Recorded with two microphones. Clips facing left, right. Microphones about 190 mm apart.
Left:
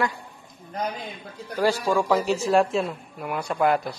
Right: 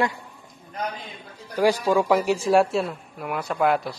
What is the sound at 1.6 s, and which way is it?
A man's voice, 15° right (ahead or behind).